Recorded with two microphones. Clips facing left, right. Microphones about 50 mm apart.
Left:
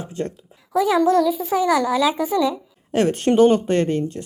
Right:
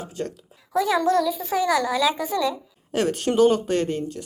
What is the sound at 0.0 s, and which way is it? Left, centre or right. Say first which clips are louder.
Speech: left 3 dB; left.